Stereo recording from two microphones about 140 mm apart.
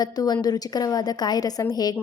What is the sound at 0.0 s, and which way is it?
Speech, 30° left (ahead or behind).